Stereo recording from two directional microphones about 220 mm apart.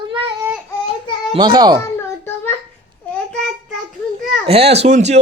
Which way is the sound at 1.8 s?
10° left (ahead or behind).